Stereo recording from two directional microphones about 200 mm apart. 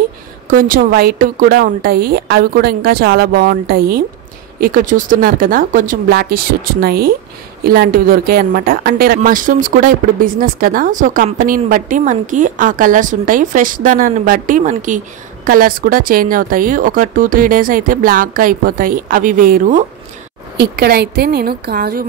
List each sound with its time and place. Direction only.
0.5 s speech: 45° right (ahead or behind)